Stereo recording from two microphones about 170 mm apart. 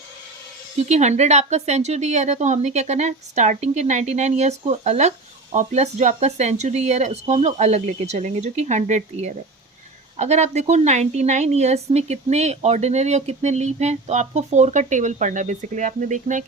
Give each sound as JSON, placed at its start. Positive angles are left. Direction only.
{"t": 0.9, "sound": "a woman's voice", "side_deg": -40}